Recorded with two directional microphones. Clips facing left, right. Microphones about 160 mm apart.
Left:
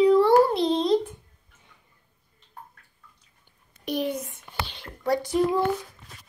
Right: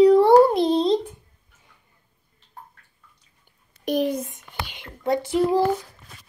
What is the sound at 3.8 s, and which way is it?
Speech, 45° right (ahead or behind).